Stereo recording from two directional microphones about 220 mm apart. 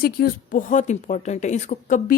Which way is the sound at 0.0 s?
40° left (ahead or behind).